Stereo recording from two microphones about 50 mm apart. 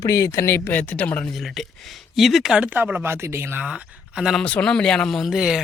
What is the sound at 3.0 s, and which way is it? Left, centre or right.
Speech, right.